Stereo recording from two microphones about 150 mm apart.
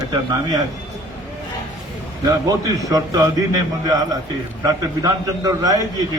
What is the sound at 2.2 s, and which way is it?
A man's voice, 25° right (ahead or behind).